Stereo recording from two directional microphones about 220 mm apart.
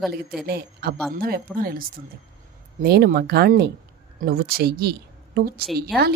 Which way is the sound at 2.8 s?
45° right (ahead or behind).